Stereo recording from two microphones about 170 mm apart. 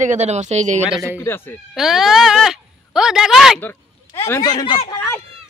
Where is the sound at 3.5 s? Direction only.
15° left (ahead or behind).